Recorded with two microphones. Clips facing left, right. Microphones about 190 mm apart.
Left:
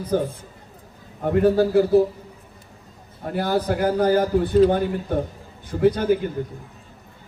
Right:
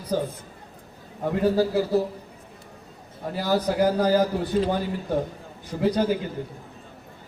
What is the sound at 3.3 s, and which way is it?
Speech, 55° left (ahead or behind).